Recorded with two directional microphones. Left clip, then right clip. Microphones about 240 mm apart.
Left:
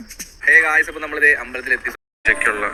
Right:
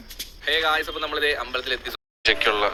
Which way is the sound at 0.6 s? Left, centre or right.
Right.